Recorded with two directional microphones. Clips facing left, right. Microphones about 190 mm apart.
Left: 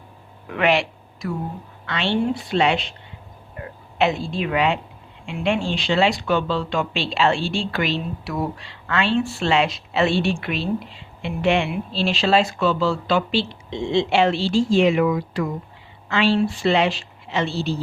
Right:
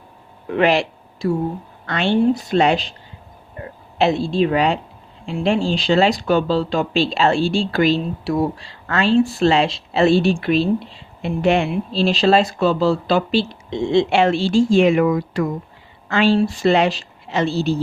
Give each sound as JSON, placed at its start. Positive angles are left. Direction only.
{"t": 0.4, "sound": "speech", "side_deg": -35}
{"t": 1.9, "sound": "a woman's voice", "side_deg": -45}